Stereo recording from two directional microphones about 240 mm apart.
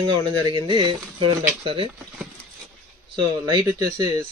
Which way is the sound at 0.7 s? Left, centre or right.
Right.